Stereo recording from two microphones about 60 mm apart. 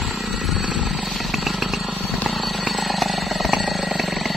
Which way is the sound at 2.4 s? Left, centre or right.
Centre.